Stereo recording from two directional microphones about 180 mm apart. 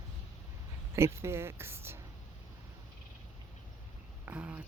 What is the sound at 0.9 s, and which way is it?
Speech, 15° right (ahead or behind).